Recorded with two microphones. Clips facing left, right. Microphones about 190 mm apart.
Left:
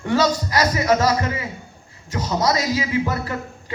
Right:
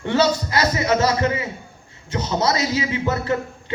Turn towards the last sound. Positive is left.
turn(degrees=-25)  # may be behind; listen again after turning